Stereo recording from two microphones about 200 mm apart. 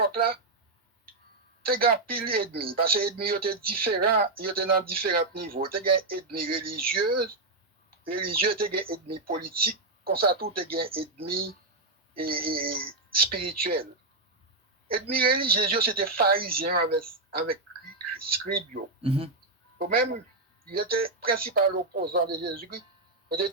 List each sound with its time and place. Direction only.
0.0 s speech: 45° right (ahead or behind)
1.6 s speech: 50° right (ahead or behind)
10.8 s speech: 25° right (ahead or behind)
11.3 s speech: 50° right (ahead or behind)
14.9 s speech: 50° right (ahead or behind)
17.3 s a sound: 50° right (ahead or behind)
18.4 s speech: 45° right (ahead or behind)
19.0 s speech: 30° right (ahead or behind)
19.8 s speech: 45° right (ahead or behind)